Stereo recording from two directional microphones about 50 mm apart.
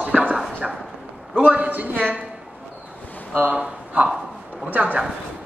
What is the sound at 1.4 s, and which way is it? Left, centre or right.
Speech, right.